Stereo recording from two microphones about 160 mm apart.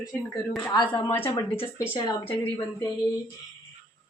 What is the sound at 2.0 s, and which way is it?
Speech, 25° left (ahead or behind).